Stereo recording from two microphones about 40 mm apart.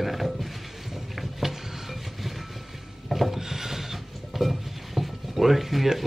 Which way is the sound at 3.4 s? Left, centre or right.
Centre.